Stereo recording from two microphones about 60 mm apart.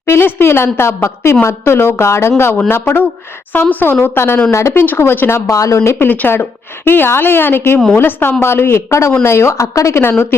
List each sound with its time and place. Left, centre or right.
0.0 s a woman's voice: left
5.5 s a woman's voice: left
6.0 s a woman's voice: left
10.0 s a woman's voice: left